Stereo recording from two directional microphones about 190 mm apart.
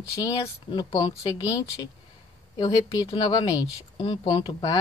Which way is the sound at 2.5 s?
25° left (ahead or behind).